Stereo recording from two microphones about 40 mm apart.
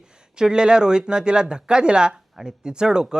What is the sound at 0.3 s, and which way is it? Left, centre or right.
Speech, centre.